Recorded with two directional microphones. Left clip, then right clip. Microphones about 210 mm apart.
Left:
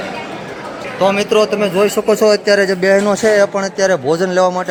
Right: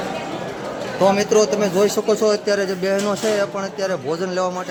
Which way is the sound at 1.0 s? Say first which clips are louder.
Left 3 dB; centre (ahead or behind).